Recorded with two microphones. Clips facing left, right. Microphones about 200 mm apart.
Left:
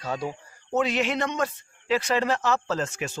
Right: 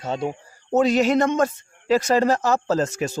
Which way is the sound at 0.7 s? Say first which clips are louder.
Right 7 dB; 40° right (ahead or behind).